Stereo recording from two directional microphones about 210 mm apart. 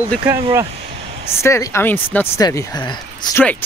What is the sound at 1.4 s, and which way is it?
Speech, 15° left (ahead or behind).